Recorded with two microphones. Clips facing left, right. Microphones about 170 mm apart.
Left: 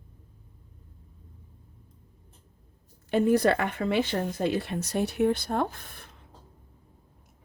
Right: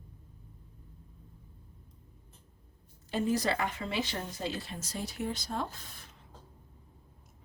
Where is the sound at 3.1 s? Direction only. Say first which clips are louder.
Left 8 dB; 60° left (ahead or behind).